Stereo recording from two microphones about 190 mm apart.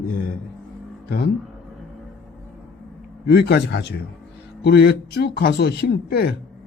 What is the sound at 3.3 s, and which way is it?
A man's voice, 55° left (ahead or behind).